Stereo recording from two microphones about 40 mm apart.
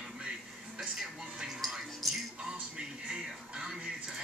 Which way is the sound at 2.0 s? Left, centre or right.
Centre.